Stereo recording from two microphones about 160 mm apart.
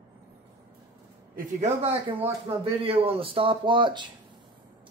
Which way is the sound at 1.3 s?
45° right (ahead or behind).